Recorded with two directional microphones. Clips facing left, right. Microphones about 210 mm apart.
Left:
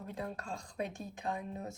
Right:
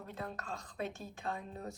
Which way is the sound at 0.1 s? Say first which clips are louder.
Left 2 dB; 10° left (ahead or behind).